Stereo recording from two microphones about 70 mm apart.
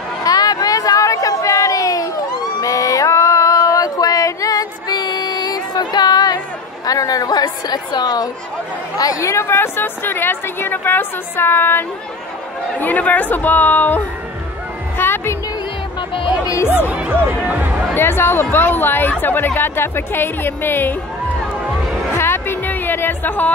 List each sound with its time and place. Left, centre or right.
0.2 s a sound: left
6.9 s a woman's voice: left
8.9 s speech: left
15.0 s music: left
16.8 s speech: centre
17.9 s speech: left
22.1 s music: left